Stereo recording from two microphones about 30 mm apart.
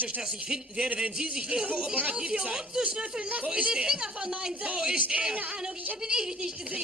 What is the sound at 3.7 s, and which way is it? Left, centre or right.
A woman's voice, right.